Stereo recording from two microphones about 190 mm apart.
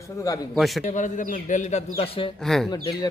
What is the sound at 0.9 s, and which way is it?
A man's voice, 40° left (ahead or behind).